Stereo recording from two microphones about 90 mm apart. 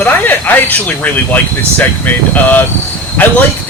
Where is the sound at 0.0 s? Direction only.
20° left (ahead or behind).